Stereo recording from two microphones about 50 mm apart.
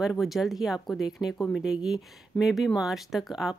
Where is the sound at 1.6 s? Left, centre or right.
Centre.